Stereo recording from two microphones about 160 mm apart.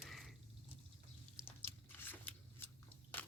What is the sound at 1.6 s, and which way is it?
Biting, 15° left (ahead or behind).